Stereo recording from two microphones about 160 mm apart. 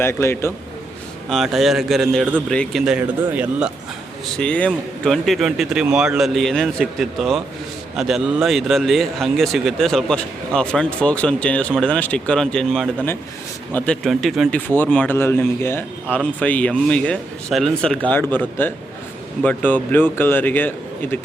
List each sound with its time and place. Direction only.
0.0 s a man's voice: 15° left (ahead or behind)
1.3 s speech: centre (ahead or behind)
4.4 s speech: 5° left (ahead or behind)
14.5 s a man's voice: 10° left (ahead or behind)